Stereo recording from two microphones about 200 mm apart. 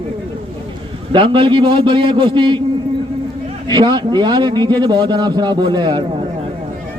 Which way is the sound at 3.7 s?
20° right (ahead or behind).